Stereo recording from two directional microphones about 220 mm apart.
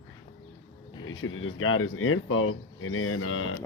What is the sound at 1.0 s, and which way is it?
Speech, 65° left (ahead or behind).